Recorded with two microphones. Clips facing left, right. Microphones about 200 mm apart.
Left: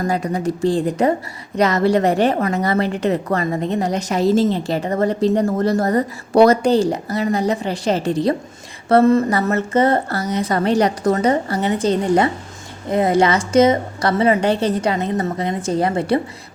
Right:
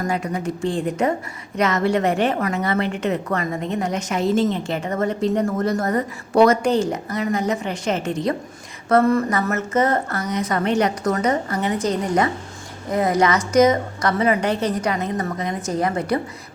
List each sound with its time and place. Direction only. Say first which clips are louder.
0.1 s a woman's voice: left 4 dB; 35° left (ahead or behind)